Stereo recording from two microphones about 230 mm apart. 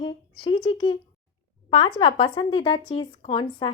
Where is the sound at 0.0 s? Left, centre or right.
Centre.